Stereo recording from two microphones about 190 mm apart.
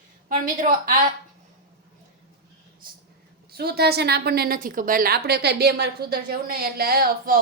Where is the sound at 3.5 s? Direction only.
55° right (ahead or behind).